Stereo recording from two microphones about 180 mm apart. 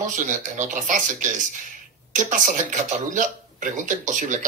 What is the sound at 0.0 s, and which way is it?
Speech, 45° right (ahead or behind).